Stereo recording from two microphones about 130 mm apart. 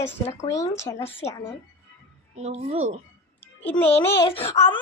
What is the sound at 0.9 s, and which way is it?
Speech, 50° left (ahead or behind).